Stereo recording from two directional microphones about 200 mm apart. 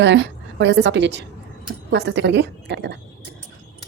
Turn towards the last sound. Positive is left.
turn(degrees=-60)  # may be behind; listen again after turning